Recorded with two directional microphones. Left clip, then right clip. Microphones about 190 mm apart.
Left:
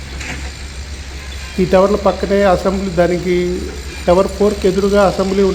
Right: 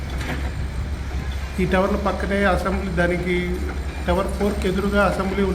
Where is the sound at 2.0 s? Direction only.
40° left (ahead or behind).